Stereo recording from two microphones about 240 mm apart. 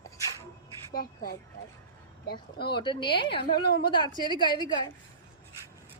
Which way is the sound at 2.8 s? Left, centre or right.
Centre.